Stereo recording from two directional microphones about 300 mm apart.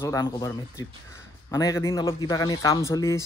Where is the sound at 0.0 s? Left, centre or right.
Centre.